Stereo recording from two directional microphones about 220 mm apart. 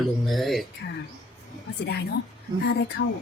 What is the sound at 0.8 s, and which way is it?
Speech, 45° left (ahead or behind).